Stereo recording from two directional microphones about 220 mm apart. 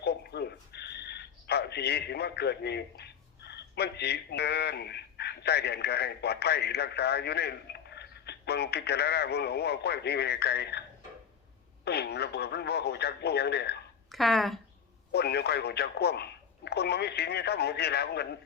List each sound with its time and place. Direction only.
0.0 s speech: 50° left (ahead or behind)
11.9 s speech: 50° left (ahead or behind)
14.1 s speech: centre (ahead or behind)
15.1 s speech: 50° left (ahead or behind)